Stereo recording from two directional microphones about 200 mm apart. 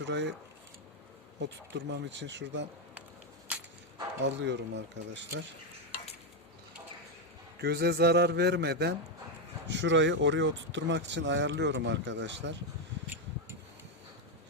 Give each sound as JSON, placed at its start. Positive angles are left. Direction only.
{"t": 0.0, "sound": "speech", "side_deg": -60}
{"t": 1.9, "sound": "speech", "side_deg": -60}
{"t": 4.2, "sound": "speech", "side_deg": -65}
{"t": 7.6, "sound": "speech", "side_deg": -55}